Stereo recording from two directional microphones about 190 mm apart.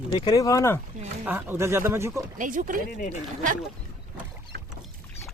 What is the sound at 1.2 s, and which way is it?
Speech, 10° right (ahead or behind).